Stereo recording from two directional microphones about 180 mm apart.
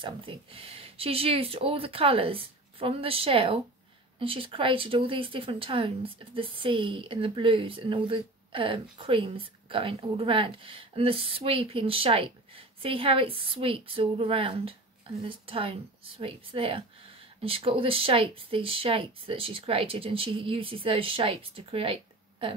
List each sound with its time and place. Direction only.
0.0 s speech: 30° right (ahead or behind)